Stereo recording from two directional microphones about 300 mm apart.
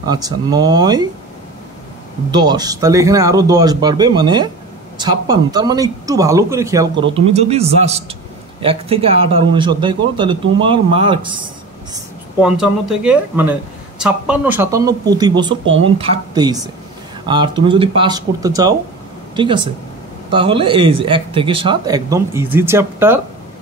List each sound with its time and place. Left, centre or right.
0.0 s speech: centre
2.3 s speech: centre
11.9 s speech: centre
15.6 s speech: right
16.0 s speech: centre